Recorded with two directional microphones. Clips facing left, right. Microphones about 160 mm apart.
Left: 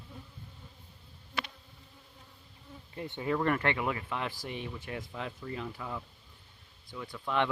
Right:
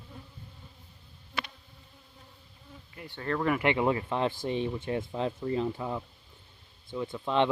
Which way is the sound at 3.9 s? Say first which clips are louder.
Right 7 dB; 30° right (ahead or behind).